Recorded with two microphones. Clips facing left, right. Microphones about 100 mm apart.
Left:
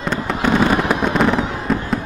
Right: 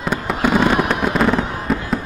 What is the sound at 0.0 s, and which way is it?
Fireworks, 10° right (ahead or behind).